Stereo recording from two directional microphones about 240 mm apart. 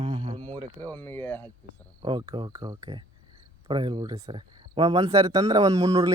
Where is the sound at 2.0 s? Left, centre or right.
Centre.